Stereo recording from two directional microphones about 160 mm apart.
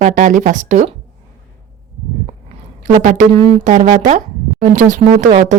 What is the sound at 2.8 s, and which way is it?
A woman's voice, 55° right (ahead or behind).